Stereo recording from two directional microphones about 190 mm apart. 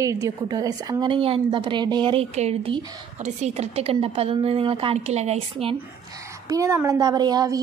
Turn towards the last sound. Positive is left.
turn(degrees=-20)  # may be behind; listen again after turning